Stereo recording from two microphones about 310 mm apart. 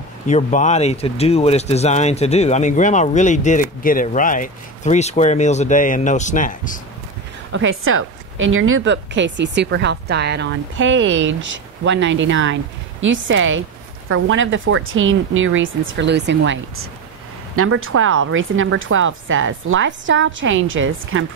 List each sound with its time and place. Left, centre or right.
0.3 s speech: left
7.5 s a woman's voice: right